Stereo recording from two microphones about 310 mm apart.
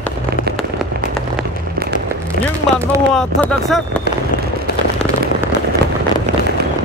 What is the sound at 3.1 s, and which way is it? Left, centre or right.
Speech, centre.